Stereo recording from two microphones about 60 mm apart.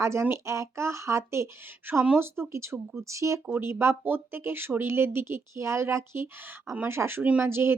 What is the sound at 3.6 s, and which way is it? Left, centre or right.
Speech, right.